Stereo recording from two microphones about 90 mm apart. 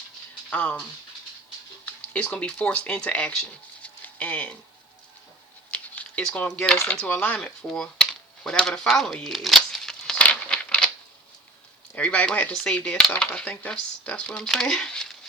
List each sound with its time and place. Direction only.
0.5 s dishes: 15° left (ahead or behind)
1.8 s speech: 15° left (ahead or behind)
3.8 s a sound: 15° left (ahead or behind)
5.7 s a sound: 15° left (ahead or behind)
6.8 s dishes: 15° left (ahead or behind)
7.3 s dishes: 10° left (ahead or behind)
8.4 s speech: 5° left (ahead or behind)
9.2 s crumpling: centre (ahead or behind)
11.9 s dishes: 15° left (ahead or behind)